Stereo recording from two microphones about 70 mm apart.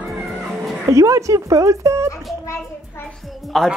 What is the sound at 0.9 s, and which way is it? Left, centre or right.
Speech, right.